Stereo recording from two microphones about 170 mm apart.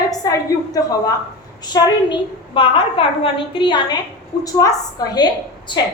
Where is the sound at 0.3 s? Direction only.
20° left (ahead or behind).